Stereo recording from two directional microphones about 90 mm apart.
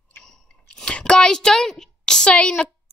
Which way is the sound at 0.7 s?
10° left (ahead or behind).